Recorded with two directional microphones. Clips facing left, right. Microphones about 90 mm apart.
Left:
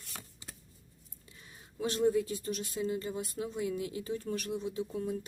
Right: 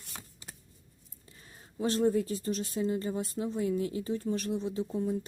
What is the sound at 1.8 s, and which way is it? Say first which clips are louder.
Speech: right 2 dB; 35° right (ahead or behind).